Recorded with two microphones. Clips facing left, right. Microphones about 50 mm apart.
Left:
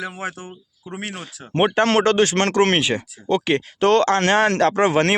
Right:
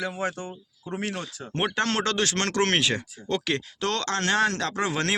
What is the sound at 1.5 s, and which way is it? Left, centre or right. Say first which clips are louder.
Speech: left 9 dB; left.